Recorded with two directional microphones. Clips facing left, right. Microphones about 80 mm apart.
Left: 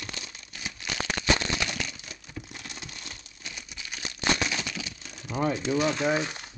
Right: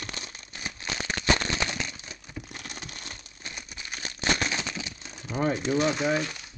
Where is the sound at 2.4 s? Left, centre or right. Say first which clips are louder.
Right 1 dB; right.